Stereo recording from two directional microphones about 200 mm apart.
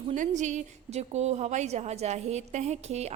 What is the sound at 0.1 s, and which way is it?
A woman's voice, 35° right (ahead or behind).